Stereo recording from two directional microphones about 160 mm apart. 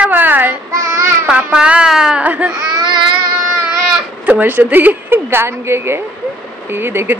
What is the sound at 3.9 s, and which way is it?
A child's voice, 10° right (ahead or behind).